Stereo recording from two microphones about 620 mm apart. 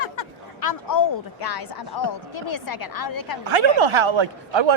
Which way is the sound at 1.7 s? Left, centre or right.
Left.